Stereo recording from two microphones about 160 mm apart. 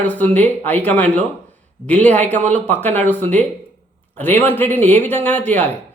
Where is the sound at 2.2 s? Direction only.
45° right (ahead or behind).